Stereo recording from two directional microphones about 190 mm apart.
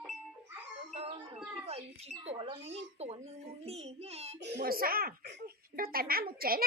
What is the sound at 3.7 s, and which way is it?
Speech, 35° right (ahead or behind).